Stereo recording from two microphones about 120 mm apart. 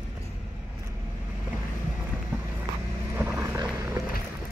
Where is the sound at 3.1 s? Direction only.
20° right (ahead or behind).